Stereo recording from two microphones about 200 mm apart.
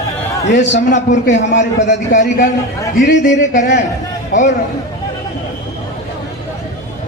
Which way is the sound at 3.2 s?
40° left (ahead or behind).